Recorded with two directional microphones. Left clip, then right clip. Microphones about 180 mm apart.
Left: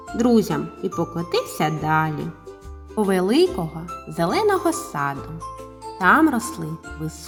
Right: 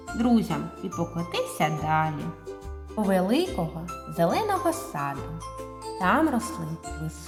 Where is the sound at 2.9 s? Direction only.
20° left (ahead or behind).